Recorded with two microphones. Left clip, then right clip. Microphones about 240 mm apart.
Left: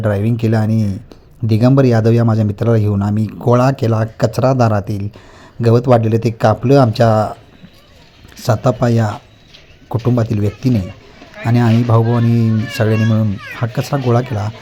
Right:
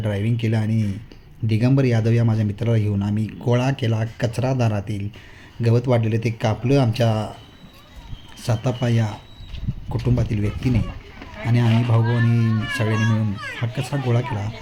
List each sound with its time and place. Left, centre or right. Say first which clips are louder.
0.0 s speech: left 9 dB; left
8.4 s speech: left 10 dB; left